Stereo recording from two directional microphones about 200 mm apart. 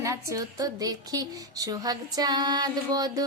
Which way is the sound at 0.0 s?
15° right (ahead or behind).